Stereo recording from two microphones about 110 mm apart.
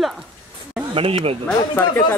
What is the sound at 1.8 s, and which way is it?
Speech, 20° left (ahead or behind).